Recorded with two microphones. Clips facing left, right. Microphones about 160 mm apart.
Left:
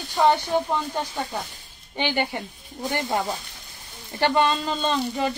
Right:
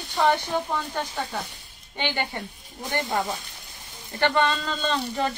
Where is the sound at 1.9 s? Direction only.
15° left (ahead or behind).